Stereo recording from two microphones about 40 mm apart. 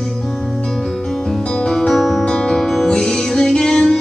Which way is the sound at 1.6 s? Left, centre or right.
Centre.